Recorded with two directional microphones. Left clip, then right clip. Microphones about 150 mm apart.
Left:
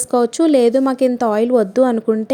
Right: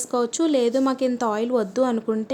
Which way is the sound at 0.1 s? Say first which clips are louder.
Left 8 dB; 35° left (ahead or behind).